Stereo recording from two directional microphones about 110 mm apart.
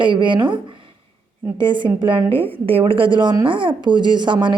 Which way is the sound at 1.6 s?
45° right (ahead or behind).